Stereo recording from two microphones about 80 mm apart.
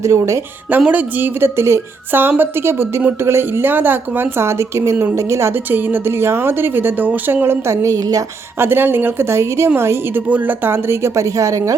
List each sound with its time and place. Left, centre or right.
0.0 s a woman's voice: right
0.9 s a woman's voice: right
8.5 s a woman's voice: right
10.2 s a woman's voice: right